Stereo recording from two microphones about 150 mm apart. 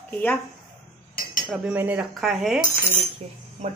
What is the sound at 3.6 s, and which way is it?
Speech, 50° right (ahead or behind).